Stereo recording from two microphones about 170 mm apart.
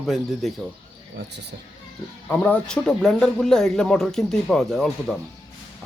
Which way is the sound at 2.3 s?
10° left (ahead or behind).